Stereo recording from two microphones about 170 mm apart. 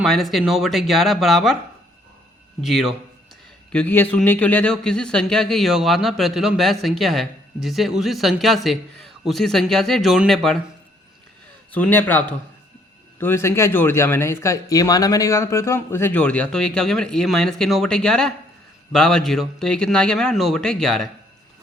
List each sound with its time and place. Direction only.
0.0 s speech: centre (ahead or behind)
2.6 s speech: centre (ahead or behind)
11.7 s speech: 10° left (ahead or behind)